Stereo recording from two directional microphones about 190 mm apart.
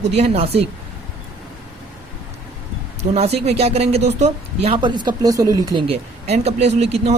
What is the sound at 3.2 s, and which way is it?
Speech, 35° right (ahead or behind).